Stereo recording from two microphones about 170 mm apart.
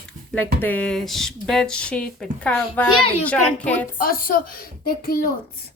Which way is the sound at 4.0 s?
55° left (ahead or behind).